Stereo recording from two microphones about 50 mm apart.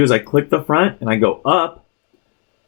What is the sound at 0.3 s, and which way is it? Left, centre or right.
Speech, centre.